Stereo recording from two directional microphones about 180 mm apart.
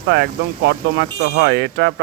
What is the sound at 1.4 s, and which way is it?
Speech, 70° right (ahead or behind).